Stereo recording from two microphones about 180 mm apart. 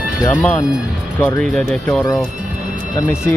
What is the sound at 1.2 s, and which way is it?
Speech, 10° left (ahead or behind).